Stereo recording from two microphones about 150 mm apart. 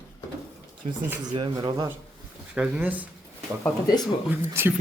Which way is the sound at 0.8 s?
45° right (ahead or behind).